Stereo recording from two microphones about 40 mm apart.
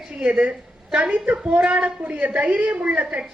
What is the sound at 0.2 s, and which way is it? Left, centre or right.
A woman's voice, right.